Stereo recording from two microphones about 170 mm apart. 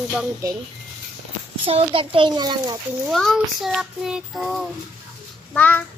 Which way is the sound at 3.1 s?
Centre (ahead or behind).